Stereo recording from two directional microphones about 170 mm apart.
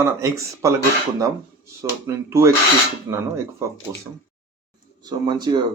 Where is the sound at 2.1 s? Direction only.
15° right (ahead or behind).